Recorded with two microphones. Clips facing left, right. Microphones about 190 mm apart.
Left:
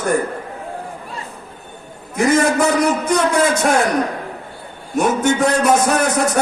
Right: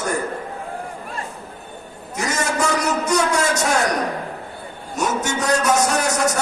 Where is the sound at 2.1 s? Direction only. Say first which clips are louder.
Left 8 dB; 55° left (ahead or behind).